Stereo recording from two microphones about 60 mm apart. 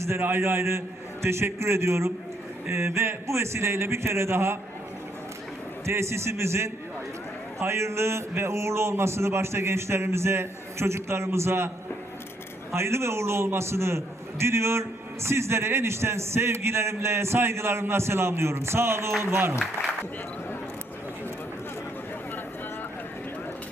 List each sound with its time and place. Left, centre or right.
0.0 s a man's voice: right
5.8 s a man's voice: right
12.7 s a man's voice: right